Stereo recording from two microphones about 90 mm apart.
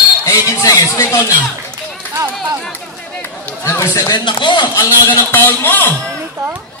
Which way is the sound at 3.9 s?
50° left (ahead or behind).